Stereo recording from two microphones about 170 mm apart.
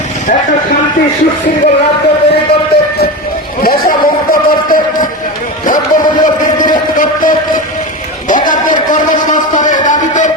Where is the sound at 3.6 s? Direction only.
60° left (ahead or behind).